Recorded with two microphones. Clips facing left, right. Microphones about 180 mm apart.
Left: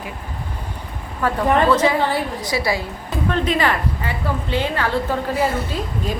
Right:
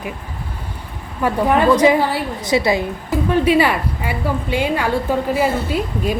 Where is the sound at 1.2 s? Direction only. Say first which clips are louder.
Right 2 dB; 10° right (ahead or behind).